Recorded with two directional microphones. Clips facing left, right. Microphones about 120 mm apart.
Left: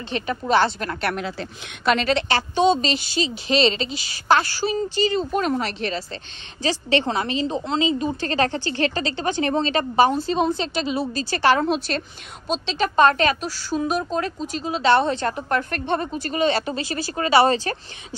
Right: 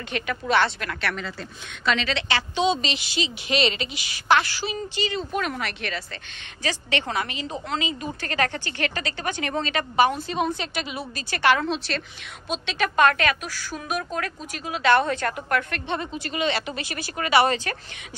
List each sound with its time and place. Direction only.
0.1 s a woman's voice: 35° left (ahead or behind)
1.9 s a woman's voice: 50° left (ahead or behind)